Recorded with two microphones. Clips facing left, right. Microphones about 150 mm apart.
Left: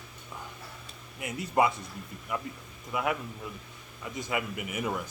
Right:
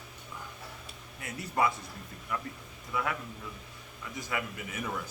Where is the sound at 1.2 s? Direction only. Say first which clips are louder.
Left 4 dB; 20° left (ahead or behind).